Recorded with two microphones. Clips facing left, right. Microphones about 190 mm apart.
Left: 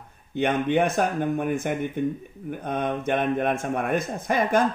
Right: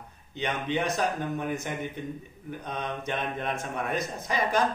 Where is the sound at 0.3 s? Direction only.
55° left (ahead or behind).